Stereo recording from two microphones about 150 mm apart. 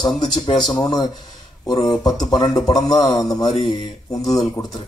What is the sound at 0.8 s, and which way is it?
Speech, 30° left (ahead or behind).